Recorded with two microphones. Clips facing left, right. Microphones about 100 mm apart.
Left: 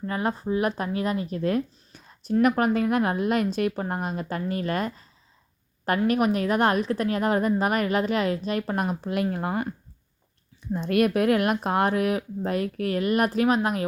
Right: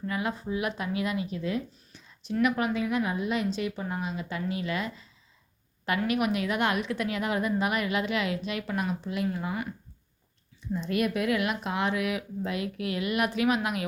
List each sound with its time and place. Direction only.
0.0 s a woman's voice: 40° left (ahead or behind)
6.1 s a woman's voice: 40° left (ahead or behind)
10.8 s speech: 55° left (ahead or behind); by 13.8 s 40° left (ahead or behind)